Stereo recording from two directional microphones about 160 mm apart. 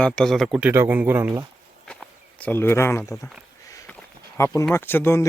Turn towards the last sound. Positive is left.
turn(degrees=15)  # may be behind; listen again after turning